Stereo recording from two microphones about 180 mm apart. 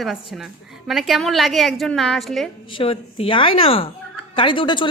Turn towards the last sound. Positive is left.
turn(degrees=25)  # may be behind; listen again after turning